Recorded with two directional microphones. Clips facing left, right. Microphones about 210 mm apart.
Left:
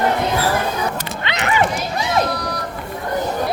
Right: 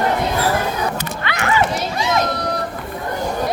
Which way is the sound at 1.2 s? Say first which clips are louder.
Right 1 dB; 20° left (ahead or behind).